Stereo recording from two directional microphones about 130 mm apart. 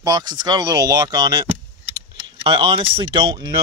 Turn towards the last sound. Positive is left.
turn(degrees=-40)  # may be behind; listen again after turning